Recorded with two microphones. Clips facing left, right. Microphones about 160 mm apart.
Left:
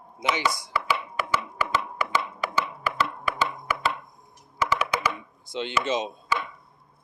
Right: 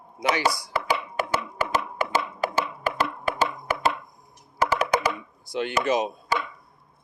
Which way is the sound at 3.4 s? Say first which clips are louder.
Right 3 dB; 45° right (ahead or behind).